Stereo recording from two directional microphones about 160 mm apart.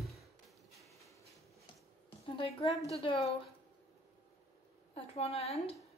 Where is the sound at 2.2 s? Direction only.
35° left (ahead or behind).